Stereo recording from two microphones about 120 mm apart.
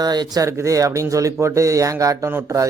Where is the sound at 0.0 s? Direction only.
35° right (ahead or behind).